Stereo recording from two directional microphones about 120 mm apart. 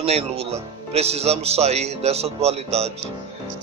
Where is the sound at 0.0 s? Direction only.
60° right (ahead or behind).